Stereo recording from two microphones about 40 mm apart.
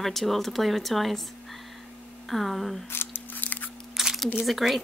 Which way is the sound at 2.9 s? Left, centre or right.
Left.